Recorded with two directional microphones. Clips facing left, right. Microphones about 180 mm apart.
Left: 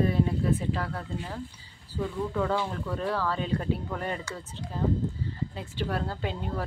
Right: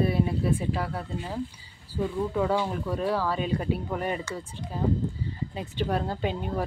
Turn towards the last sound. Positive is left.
turn(degrees=-15)  # may be behind; listen again after turning